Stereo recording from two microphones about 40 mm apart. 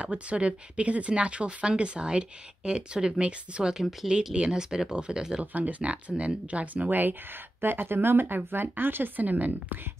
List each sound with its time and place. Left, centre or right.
0.0 s speech: right
5.4 s speech: right
6.9 s speech: right
7.6 s speech: right